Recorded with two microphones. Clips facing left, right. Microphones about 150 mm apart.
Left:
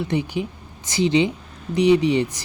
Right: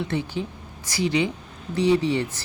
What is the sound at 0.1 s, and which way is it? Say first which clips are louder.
Speech: left 4 dB; 15° left (ahead or behind).